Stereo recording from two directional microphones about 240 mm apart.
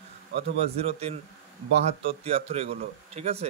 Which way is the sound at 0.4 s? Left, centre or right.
Right.